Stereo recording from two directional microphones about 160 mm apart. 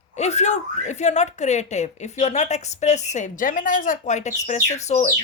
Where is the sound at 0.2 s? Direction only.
45° left (ahead or behind).